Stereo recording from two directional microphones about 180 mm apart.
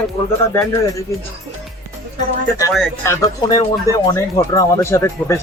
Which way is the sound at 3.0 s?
20° left (ahead or behind).